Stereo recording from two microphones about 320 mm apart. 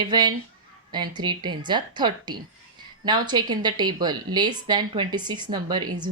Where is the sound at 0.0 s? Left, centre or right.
Centre.